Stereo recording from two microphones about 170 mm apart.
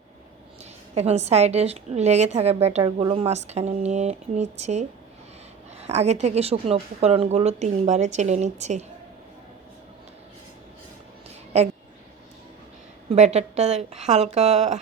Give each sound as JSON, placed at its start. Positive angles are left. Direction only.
{"t": 0.6, "sound": "a woman's voice", "side_deg": -40}
{"t": 13.1, "sound": "a woman's voice", "side_deg": -40}